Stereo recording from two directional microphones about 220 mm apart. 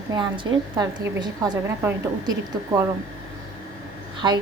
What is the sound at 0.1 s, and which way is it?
A woman's voice, 20° right (ahead or behind).